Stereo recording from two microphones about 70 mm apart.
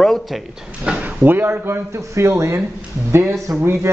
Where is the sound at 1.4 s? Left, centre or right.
Right.